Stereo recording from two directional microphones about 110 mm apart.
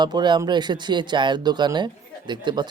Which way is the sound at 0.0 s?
40° right (ahead or behind).